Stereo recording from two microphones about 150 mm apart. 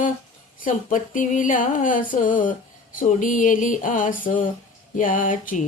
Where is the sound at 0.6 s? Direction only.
60° left (ahead or behind).